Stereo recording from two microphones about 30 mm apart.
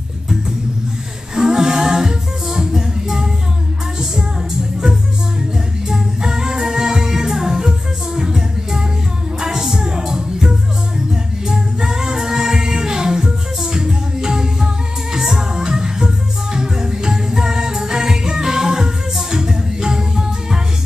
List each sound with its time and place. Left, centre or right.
1.3 s music: right
5.9 s music: centre